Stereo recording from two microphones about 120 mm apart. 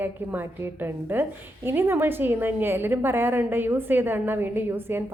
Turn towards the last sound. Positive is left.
turn(degrees=-20)  # may be behind; listen again after turning